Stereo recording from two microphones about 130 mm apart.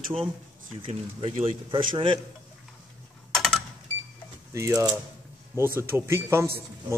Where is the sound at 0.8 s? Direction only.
50° right (ahead or behind).